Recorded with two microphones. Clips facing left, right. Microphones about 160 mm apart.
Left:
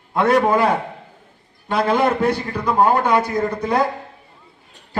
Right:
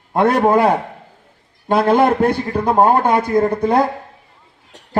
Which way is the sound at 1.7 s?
55° right (ahead or behind).